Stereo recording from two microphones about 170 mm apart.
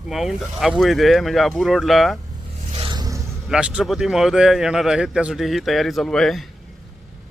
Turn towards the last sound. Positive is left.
turn(degrees=0)  # may be behind; listen again after turning